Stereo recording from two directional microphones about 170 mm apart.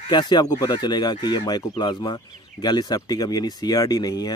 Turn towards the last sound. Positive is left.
turn(degrees=20)  # may be behind; listen again after turning